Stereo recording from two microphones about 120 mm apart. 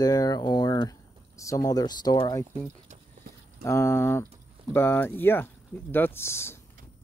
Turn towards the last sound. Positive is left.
turn(degrees=20)  # may be behind; listen again after turning